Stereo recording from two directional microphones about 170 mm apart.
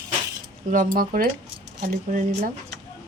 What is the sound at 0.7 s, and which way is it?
Speech, 55° right (ahead or behind).